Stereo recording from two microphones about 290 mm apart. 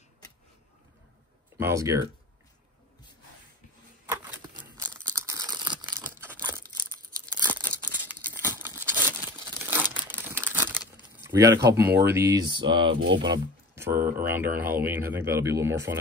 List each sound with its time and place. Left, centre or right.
1.6 s speech: centre
4.1 s a sound: centre
5.2 s crumpling: centre
7.3 s tearing: centre
9.9 s crumpling: centre
11.2 s speech: centre
13.0 s speech: right
13.3 s a sound: centre
13.9 s speech: right
14.2 s speech: centre